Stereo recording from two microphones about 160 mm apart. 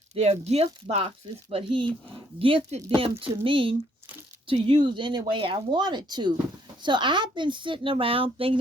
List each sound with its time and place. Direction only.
0.1 s speech: 40° right (ahead or behind)